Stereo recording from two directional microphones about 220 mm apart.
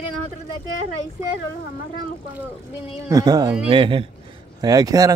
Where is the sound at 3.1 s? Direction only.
15° right (ahead or behind).